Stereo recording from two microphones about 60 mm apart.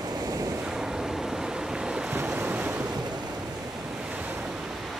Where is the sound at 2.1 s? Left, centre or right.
Right.